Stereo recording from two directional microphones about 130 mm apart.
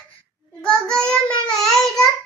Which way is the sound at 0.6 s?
5° left (ahead or behind).